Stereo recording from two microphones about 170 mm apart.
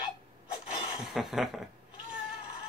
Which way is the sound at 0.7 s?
Centre (ahead or behind).